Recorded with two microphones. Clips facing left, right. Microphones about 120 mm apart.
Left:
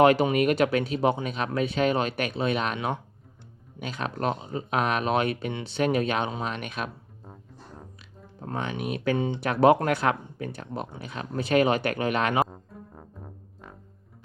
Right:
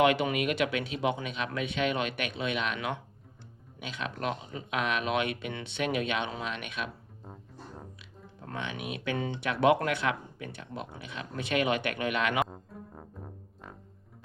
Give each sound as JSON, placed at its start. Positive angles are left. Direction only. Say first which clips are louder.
{"t": 0.0, "sound": "speech", "louder": "left 6 dB", "side_deg": 40}
{"t": 8.4, "sound": "speech", "louder": "left 6 dB", "side_deg": 40}
{"t": 12.5, "sound": "music", "louder": "left 1 dB", "side_deg": 0}